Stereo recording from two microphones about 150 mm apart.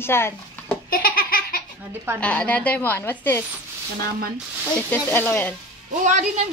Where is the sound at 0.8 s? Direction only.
70° left (ahead or behind).